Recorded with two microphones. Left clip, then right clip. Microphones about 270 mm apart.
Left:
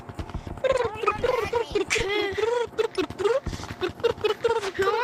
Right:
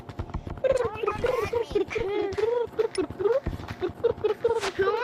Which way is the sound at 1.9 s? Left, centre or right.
Left.